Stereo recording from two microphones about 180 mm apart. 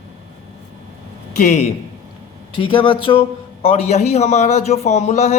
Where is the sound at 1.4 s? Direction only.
40° left (ahead or behind).